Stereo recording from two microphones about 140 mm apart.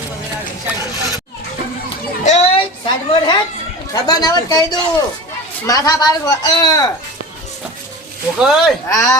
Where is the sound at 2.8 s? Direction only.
35° left (ahead or behind).